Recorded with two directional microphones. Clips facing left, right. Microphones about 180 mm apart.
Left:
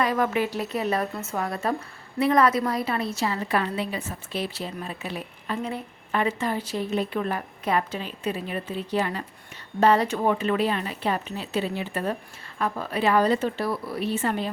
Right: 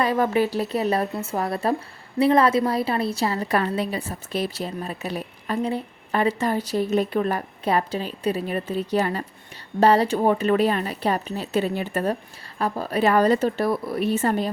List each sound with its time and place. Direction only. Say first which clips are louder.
0.0 s a woman's voice: right 3 dB; 30° right (ahead or behind); by 12.1 s 45° right (ahead or behind)
12.5 s a woman's voice: right 3 dB; 35° right (ahead or behind)